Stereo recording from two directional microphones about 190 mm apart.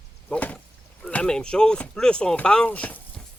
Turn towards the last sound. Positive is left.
turn(degrees=5)  # may be behind; listen again after turning